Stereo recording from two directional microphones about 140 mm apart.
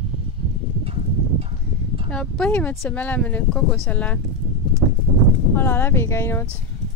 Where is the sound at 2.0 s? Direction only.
5° left (ahead or behind).